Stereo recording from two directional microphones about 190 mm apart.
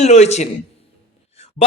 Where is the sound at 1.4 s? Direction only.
35° left (ahead or behind).